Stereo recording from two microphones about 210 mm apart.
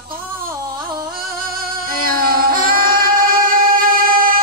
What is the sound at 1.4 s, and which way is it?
Singing, 45° right (ahead or behind).